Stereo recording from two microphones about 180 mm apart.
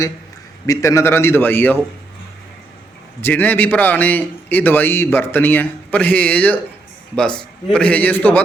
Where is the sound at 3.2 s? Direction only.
10° left (ahead or behind).